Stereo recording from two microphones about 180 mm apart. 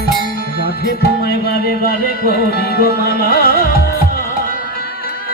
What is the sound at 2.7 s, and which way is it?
Music, 60° left (ahead or behind).